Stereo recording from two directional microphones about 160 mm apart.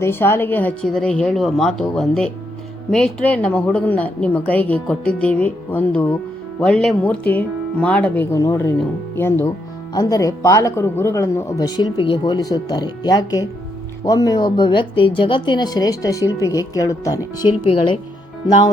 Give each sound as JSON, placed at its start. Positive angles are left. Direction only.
{"t": 0.0, "sound": "a woman's voice", "side_deg": 15}
{"t": 17.7, "sound": "speech", "side_deg": 35}